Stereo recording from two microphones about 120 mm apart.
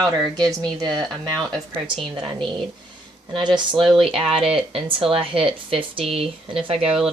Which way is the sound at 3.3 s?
40° right (ahead or behind).